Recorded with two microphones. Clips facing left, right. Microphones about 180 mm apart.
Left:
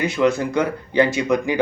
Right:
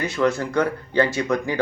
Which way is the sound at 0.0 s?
15° left (ahead or behind).